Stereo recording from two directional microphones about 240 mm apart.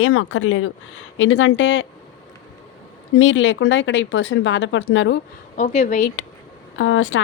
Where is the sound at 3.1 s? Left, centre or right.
Left.